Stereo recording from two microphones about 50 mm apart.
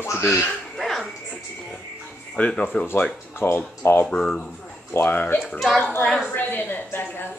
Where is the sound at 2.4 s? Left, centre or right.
Left.